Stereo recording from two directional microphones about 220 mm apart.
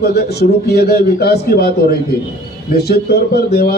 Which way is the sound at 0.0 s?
45° left (ahead or behind).